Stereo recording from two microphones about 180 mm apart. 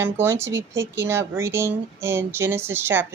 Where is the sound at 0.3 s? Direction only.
90° right.